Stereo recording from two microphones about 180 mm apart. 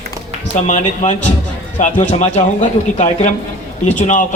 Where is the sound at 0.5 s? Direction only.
40° left (ahead or behind).